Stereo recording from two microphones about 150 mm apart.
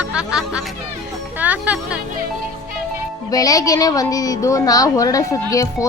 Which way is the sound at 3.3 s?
25° left (ahead or behind).